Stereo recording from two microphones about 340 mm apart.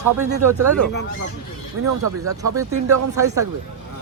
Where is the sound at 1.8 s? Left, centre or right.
Right.